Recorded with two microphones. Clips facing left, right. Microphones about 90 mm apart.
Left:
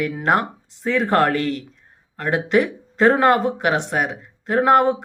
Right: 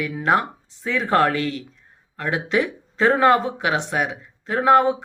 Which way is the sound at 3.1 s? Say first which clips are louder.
Even; 40° left (ahead or behind).